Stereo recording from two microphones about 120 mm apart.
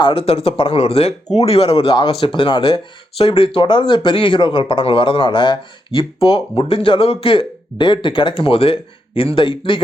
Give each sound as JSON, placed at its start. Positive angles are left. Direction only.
{"t": 0.0, "sound": "speech", "side_deg": 50}